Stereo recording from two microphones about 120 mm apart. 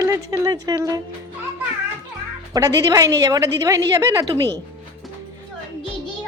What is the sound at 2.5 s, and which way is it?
A woman's voice, 25° right (ahead or behind).